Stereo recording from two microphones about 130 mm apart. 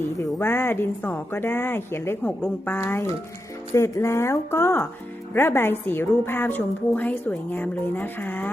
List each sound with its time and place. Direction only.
0.3 s a woman's voice: 20° left (ahead or behind)